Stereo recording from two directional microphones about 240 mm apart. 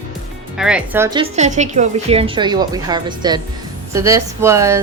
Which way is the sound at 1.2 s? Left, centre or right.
Right.